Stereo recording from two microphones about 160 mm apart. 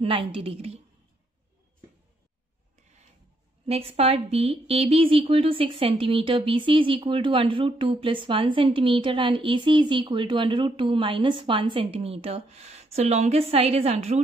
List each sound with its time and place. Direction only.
0.0 s a woman's voice: 35° right (ahead or behind)
3.6 s a woman's voice: 40° right (ahead or behind)